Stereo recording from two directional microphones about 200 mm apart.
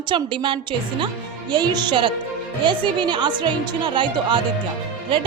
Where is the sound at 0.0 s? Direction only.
25° right (ahead or behind).